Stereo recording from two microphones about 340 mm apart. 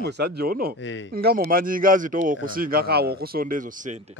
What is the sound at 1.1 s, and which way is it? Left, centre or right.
Speech, right.